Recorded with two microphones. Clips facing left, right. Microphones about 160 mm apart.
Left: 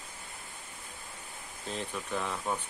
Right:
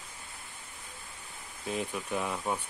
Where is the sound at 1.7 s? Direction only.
10° right (ahead or behind).